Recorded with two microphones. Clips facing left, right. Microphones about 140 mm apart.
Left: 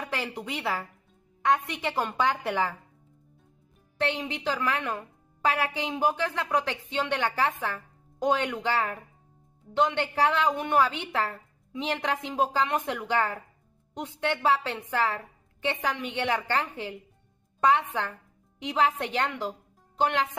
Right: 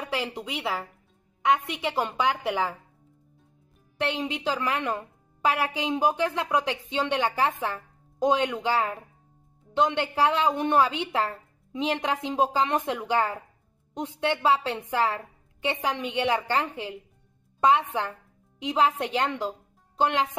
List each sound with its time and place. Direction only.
0.1 s a woman's voice: 15° right (ahead or behind)
4.0 s a woman's voice: 15° right (ahead or behind)